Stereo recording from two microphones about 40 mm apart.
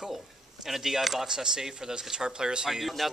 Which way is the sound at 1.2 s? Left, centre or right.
Centre.